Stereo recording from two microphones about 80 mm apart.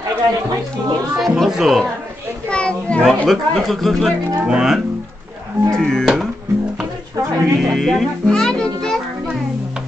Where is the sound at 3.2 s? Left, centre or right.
Centre.